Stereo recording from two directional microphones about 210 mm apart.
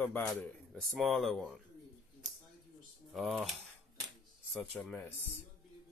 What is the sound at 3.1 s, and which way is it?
Speech, centre (ahead or behind).